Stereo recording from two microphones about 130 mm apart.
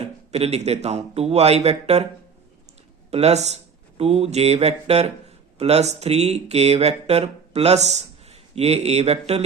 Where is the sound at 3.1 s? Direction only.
55° right (ahead or behind).